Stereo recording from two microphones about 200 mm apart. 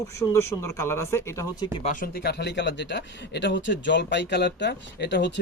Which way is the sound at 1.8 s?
40° left (ahead or behind).